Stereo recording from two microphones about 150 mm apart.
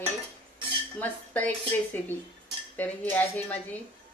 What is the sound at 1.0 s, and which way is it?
Speech, 10° left (ahead or behind).